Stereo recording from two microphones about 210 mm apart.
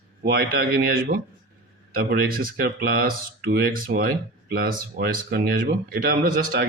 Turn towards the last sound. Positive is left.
turn(degrees=-45)  # may be behind; listen again after turning